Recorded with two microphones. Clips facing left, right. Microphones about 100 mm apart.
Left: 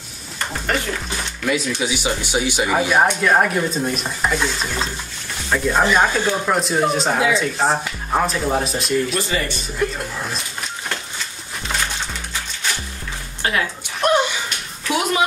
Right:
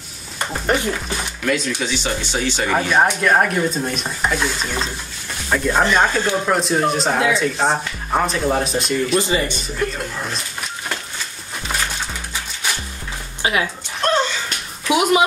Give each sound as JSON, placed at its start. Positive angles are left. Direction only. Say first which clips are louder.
{"t": 0.5, "sound": "a sound", "louder": "right 3 dB", "side_deg": -20}
{"t": 1.4, "sound": "speech", "louder": "even", "side_deg": 5}
{"t": 9.3, "sound": "speech", "louder": "right 3 dB", "side_deg": -20}
{"t": 9.8, "sound": "speech", "louder": "left 1 dB", "side_deg": 0}
{"t": 13.4, "sound": "music", "louder": "right 1 dB", "side_deg": -15}
{"t": 14.0, "sound": "a sound", "louder": "left 1 dB", "side_deg": 15}
{"t": 14.9, "sound": "speech", "louder": "right 4 dB", "side_deg": -15}